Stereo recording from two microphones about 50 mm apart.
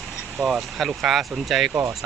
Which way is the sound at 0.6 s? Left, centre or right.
Centre.